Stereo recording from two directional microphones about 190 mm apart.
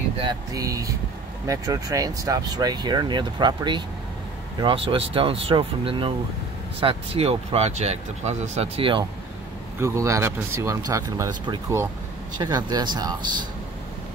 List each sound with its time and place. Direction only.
0.2 s speech: 20° right (ahead or behind)
9.8 s speech: 15° right (ahead or behind)